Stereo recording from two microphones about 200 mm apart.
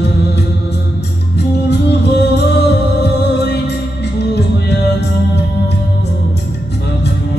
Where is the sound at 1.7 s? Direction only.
55° left (ahead or behind).